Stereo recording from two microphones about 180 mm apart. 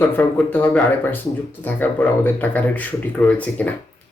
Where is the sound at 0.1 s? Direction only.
10° left (ahead or behind).